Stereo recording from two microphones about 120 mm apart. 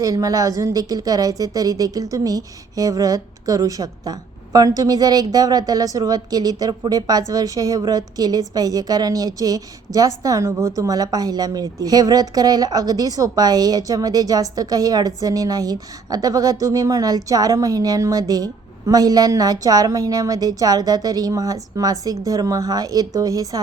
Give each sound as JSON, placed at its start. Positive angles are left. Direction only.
{"t": 0.0, "sound": "a woman's voice", "side_deg": -30}